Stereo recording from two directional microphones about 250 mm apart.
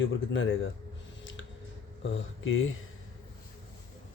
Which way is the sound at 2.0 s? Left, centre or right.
Left.